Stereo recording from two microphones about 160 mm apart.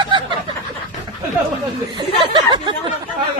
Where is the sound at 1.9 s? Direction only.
30° right (ahead or behind).